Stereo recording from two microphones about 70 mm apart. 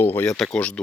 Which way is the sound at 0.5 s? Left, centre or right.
Centre.